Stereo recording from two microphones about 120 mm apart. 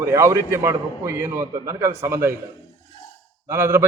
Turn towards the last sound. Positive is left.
turn(degrees=-20)  # may be behind; listen again after turning